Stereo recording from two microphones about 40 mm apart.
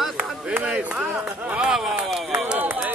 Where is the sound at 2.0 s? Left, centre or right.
Centre.